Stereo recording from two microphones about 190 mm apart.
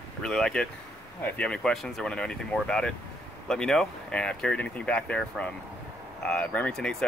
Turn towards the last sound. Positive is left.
turn(degrees=5)  # may be behind; listen again after turning